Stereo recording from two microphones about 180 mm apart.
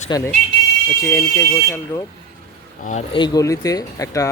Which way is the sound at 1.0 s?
15° left (ahead or behind).